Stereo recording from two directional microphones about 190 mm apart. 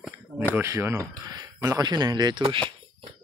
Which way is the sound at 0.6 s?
15° right (ahead or behind).